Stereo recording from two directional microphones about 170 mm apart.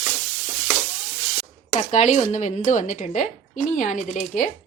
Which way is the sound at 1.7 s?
45° left (ahead or behind).